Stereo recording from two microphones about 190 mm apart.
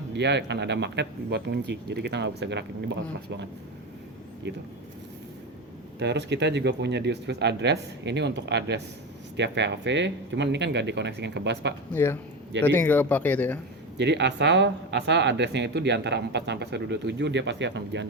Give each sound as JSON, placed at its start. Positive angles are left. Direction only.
{"t": 0.2, "sound": "speech", "side_deg": -65}
{"t": 6.0, "sound": "speech", "side_deg": -65}
{"t": 11.9, "sound": "speech", "side_deg": 10}
{"t": 14.0, "sound": "speech", "side_deg": -65}